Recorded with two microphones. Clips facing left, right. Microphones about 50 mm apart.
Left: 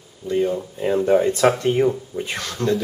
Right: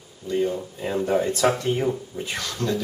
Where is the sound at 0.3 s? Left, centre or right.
Centre.